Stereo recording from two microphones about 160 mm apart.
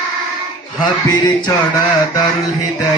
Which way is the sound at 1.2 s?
25° left (ahead or behind).